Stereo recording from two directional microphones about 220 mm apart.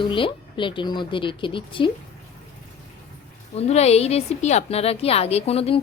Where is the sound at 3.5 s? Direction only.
30° left (ahead or behind).